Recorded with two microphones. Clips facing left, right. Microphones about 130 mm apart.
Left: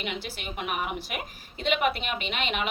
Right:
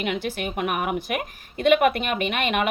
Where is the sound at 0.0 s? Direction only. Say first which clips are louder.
Right 8 dB; 50° right (ahead or behind).